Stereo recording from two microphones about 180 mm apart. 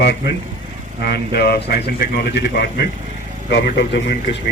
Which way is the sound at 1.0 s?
60° left (ahead or behind).